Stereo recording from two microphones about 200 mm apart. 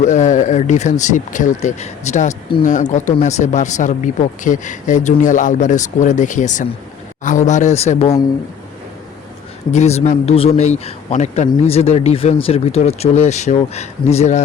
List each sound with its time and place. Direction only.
0.0 s a man's voice: 35° left (ahead or behind)
9.7 s a man's voice: 35° left (ahead or behind)